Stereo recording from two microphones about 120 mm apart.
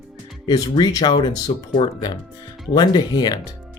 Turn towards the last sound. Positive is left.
turn(degrees=40)  # may be behind; listen again after turning